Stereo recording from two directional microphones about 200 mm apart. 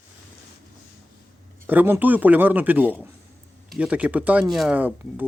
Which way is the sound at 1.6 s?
10° right (ahead or behind).